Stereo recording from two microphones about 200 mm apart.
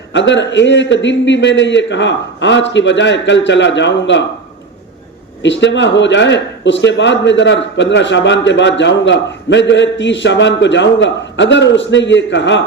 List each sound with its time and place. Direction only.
0.1 s a man's voice: 65° left (ahead or behind)
5.4 s a man's voice: 65° left (ahead or behind)